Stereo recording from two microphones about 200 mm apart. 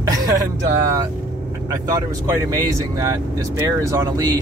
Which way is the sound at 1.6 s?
15° right (ahead or behind).